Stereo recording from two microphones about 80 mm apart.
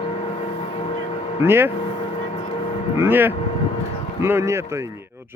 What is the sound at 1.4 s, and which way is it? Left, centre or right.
Speech, right.